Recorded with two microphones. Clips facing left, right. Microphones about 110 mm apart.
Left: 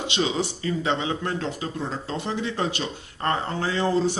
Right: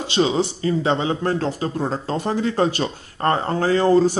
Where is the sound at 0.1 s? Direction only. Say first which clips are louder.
Right 8 dB; 30° right (ahead or behind).